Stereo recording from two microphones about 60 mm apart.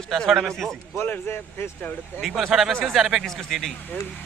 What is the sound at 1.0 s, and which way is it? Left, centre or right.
Speech, left.